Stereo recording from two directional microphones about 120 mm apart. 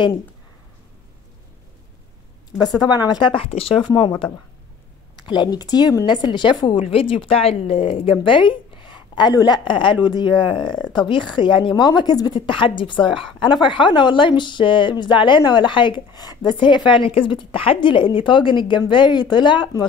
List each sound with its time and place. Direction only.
2.8 s speech: 35° left (ahead or behind); by 3.7 s 55° left (ahead or behind)
3.8 s speech: 40° left (ahead or behind)
5.1 s speech: 40° left (ahead or behind)